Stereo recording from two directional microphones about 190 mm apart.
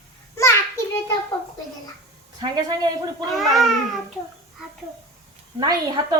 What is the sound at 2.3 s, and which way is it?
Speech, 20° right (ahead or behind).